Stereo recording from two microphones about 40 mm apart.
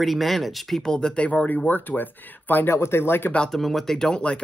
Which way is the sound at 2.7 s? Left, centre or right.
Left.